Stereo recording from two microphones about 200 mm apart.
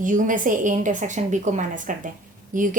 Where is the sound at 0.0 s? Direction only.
40° right (ahead or behind).